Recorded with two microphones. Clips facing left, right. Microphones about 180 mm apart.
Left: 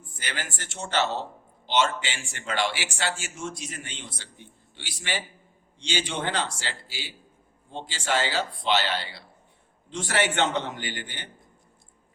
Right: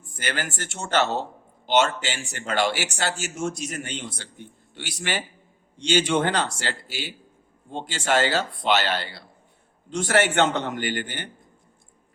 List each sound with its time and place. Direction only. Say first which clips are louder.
0.2 s speech: right 6 dB; 50° right (ahead or behind)